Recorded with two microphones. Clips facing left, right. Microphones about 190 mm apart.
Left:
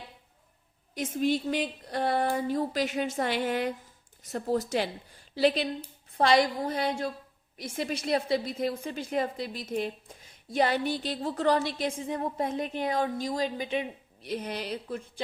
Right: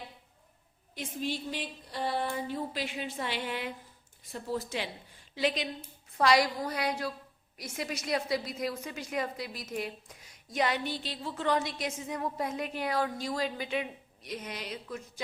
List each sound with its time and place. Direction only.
1.2 s a woman's voice: 50° left (ahead or behind); by 15.1 s 30° left (ahead or behind)